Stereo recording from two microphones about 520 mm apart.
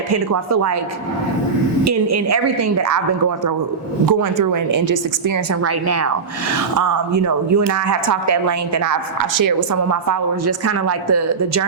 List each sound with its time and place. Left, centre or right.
0.1 s speech: right
1.9 s speech: right
9.9 s speech: right